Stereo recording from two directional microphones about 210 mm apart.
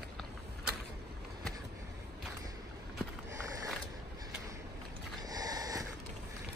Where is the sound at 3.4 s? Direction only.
15° right (ahead or behind).